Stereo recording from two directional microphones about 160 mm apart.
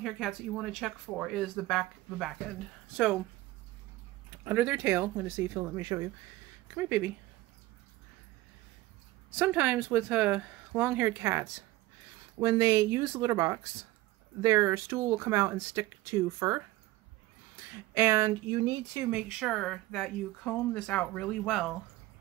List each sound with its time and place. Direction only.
0.0 s speech: centre (ahead or behind)
4.5 s speech: 10° right (ahead or behind)
9.4 s speech: 10° right (ahead or behind)
17.9 s speech: 15° right (ahead or behind); by 21.7 s 5° left (ahead or behind)